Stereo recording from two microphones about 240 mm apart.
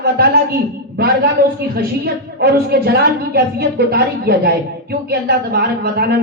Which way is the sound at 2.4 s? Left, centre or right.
Right.